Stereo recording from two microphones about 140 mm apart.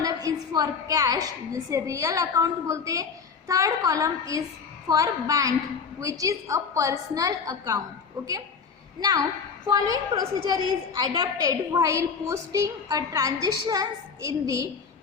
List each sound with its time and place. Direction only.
0.0 s a woman's voice: 25° right (ahead or behind)
9.0 s a woman's voice: 25° right (ahead or behind)